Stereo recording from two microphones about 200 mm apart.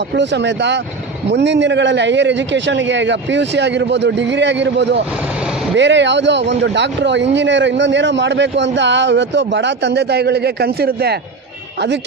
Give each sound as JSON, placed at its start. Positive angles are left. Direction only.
{"t": 0.1, "sound": "speech", "side_deg": -60}